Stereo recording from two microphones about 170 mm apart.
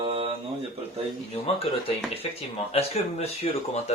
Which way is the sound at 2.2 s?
35° left (ahead or behind).